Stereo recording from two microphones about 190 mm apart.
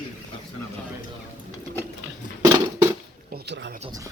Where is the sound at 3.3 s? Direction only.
65° right (ahead or behind).